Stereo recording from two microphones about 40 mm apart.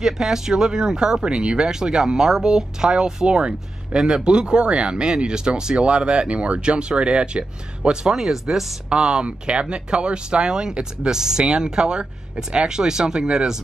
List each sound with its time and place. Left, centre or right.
0.0 s speech: centre
8.1 s speech: centre
8.8 s speech: right